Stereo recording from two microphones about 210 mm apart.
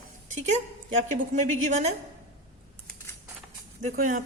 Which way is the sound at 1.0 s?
35° right (ahead or behind).